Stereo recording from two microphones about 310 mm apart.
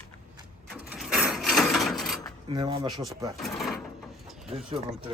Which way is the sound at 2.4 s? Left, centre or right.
Centre.